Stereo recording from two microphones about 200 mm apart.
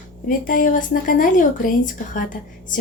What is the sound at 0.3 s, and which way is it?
Speech, 45° left (ahead or behind).